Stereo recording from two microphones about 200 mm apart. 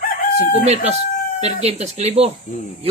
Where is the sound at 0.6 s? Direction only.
30° right (ahead or behind).